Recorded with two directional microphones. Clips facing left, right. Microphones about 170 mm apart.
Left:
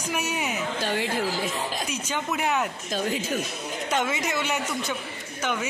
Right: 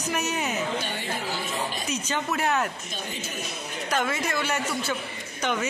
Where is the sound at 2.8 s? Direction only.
90° left.